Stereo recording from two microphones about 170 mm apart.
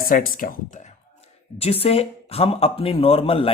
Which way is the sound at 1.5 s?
35° left (ahead or behind).